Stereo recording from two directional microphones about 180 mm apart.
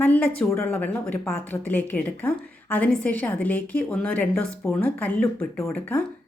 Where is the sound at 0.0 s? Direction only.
10° left (ahead or behind).